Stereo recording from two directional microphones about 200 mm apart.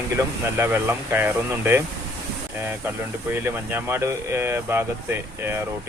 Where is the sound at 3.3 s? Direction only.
10° right (ahead or behind).